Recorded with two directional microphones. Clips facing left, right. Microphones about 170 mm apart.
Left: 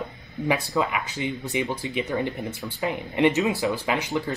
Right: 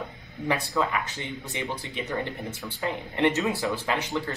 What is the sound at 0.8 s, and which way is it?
Speech, 15° left (ahead or behind).